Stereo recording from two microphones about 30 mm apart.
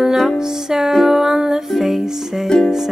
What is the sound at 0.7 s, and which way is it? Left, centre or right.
Music, centre.